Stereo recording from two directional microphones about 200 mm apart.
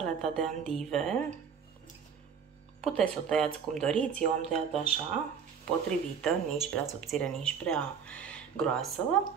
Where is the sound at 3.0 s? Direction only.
Centre (ahead or behind).